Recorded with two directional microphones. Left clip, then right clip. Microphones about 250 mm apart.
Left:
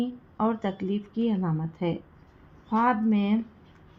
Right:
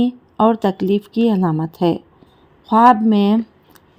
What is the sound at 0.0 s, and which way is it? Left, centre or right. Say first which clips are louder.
Speech: right 13 dB; right.